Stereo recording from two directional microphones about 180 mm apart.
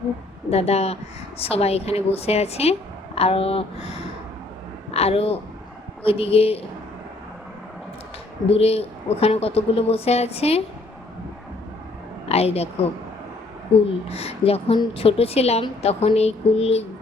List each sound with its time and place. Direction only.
0.5 s a woman's voice: 35° left (ahead or behind)
4.9 s a woman's voice: 35° left (ahead or behind)
8.4 s a woman's voice: 35° left (ahead or behind)
12.3 s a woman's voice: 35° left (ahead or behind)
13.7 s a woman's voice: 30° left (ahead or behind)